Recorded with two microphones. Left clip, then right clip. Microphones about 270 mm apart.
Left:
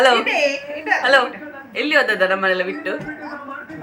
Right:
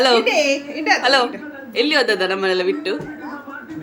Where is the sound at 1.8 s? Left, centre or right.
Centre.